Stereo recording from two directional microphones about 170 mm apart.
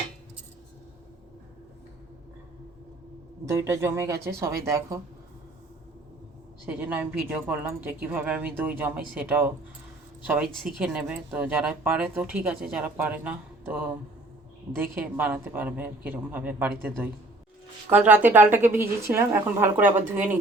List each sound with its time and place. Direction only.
3.5 s speech: 15° right (ahead or behind)
6.7 s speech: 10° right (ahead or behind)
17.9 s speech: 10° right (ahead or behind)